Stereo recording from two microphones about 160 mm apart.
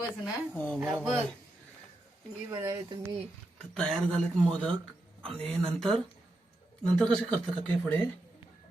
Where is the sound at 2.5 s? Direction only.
20° right (ahead or behind).